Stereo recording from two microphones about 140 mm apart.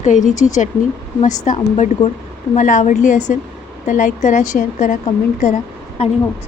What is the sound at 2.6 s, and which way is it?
Speech, 60° left (ahead or behind).